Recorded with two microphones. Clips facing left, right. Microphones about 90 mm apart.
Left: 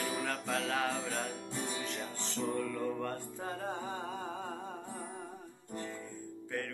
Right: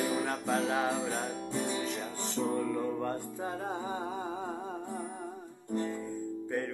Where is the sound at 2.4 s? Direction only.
20° right (ahead or behind).